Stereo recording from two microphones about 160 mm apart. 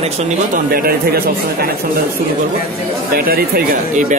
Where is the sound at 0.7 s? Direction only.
70° right (ahead or behind).